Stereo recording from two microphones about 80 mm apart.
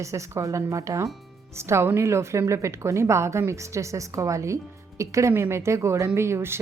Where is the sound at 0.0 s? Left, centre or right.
Right.